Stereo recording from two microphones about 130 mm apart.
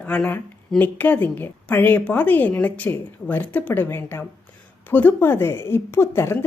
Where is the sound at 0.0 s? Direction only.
10° left (ahead or behind).